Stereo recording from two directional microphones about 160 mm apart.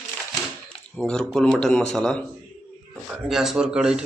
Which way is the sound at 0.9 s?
5° left (ahead or behind).